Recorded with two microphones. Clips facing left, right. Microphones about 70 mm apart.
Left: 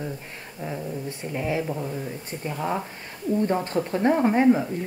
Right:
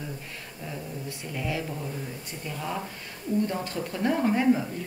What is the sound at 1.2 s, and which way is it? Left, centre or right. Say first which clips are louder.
A woman's voice: left 5 dB; left.